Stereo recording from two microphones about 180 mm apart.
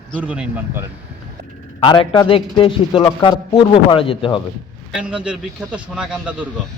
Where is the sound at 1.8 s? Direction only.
25° left (ahead or behind).